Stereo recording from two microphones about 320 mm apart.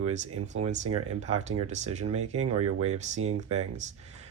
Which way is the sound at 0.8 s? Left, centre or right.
Right.